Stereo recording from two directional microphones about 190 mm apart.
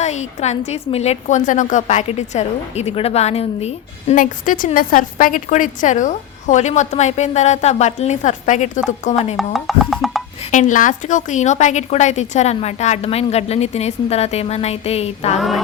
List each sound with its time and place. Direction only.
0.0 s a woman's voice: 35° left (ahead or behind)
9.3 s speech: centre (ahead or behind)
10.5 s a woman's voice: 40° left (ahead or behind)
15.4 s music: centre (ahead or behind)